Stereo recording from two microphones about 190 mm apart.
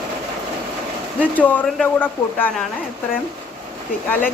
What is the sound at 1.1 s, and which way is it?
Speech, 10° left (ahead or behind).